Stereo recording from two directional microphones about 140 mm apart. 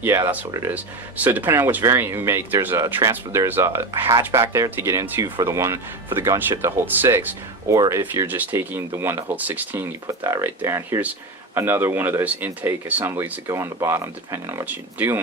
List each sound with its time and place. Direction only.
0.0 s speech: 20° right (ahead or behind)